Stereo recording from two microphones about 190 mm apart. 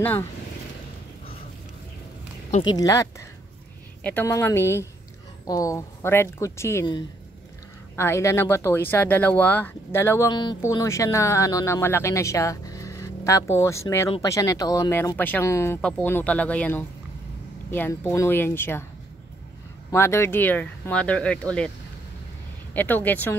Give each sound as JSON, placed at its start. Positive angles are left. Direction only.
{"t": 0.0, "sound": "speech", "side_deg": 10}
{"t": 2.7, "sound": "speech", "side_deg": 15}
{"t": 19.9, "sound": "speech", "side_deg": 15}
{"t": 22.8, "sound": "speech", "side_deg": 10}